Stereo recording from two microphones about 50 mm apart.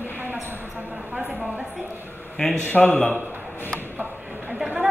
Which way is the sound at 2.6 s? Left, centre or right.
Left.